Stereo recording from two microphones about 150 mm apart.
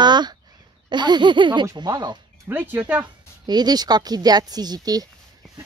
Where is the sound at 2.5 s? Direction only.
15° right (ahead or behind).